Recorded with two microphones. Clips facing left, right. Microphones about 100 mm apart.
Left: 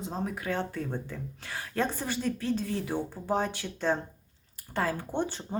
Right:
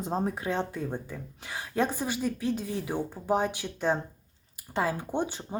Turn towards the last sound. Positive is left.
turn(degrees=-15)  # may be behind; listen again after turning